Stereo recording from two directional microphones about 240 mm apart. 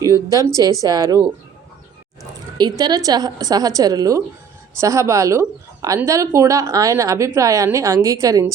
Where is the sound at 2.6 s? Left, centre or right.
Centre.